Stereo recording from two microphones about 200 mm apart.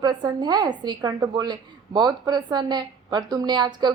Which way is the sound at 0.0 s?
20° right (ahead or behind).